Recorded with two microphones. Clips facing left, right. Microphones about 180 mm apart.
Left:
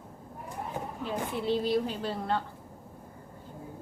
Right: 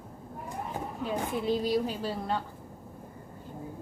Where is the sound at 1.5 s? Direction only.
10° right (ahead or behind).